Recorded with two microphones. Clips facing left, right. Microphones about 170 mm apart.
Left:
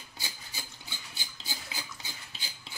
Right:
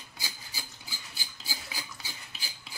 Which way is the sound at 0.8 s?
Centre (ahead or behind).